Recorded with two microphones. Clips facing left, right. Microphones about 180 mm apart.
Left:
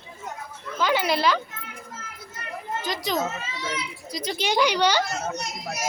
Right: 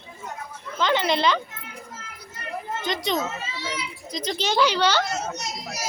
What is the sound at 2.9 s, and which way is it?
Speech, 5° left (ahead or behind).